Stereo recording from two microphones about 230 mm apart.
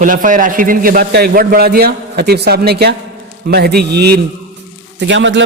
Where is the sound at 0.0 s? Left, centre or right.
Right.